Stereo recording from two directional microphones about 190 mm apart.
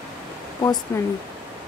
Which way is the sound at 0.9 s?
15° left (ahead or behind).